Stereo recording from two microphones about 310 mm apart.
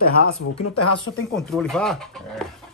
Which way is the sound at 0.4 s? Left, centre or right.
Left.